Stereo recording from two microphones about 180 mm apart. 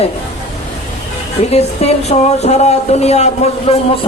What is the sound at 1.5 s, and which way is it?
Speech, 35° left (ahead or behind).